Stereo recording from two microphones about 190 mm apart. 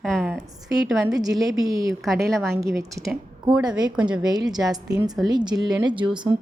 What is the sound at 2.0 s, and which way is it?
Speech, centre (ahead or behind).